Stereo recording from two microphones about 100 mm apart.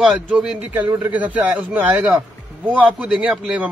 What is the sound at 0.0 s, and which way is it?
A man's voice, 10° right (ahead or behind).